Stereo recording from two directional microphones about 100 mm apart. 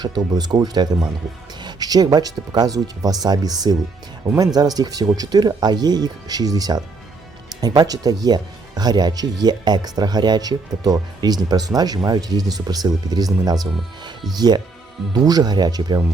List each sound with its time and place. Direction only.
0.3 s speech: 40° right (ahead or behind)